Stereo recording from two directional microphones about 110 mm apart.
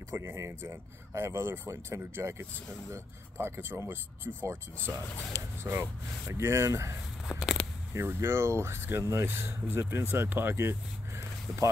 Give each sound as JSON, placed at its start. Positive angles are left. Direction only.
{"t": 0.1, "sound": "speech", "side_deg": -25}
{"t": 7.2, "sound": "a sound", "side_deg": 0}
{"t": 7.9, "sound": "speech", "side_deg": -25}